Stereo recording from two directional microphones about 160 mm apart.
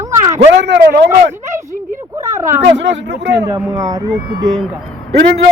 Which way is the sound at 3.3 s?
25° right (ahead or behind).